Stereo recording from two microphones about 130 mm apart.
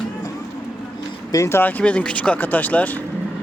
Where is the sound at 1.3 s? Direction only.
20° left (ahead or behind).